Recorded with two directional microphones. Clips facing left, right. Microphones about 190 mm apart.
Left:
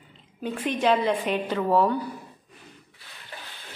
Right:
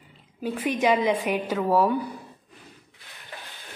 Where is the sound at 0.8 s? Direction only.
10° right (ahead or behind).